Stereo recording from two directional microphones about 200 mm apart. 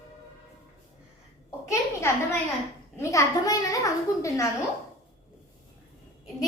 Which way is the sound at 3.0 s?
15° left (ahead or behind).